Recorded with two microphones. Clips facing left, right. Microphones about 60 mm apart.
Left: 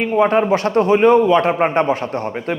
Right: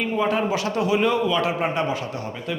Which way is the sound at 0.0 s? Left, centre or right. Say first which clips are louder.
Left 8 dB; left.